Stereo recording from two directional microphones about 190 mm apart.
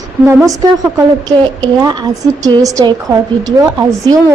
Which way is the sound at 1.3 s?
20° right (ahead or behind).